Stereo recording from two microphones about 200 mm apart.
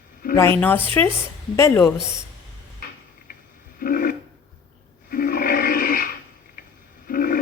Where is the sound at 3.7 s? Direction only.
45° left (ahead or behind).